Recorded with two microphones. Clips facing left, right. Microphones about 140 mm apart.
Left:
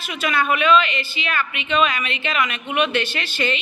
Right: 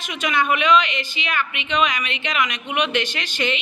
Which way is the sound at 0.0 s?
20° right (ahead or behind).